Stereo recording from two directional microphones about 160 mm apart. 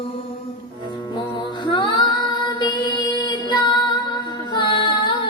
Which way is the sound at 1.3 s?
30° left (ahead or behind).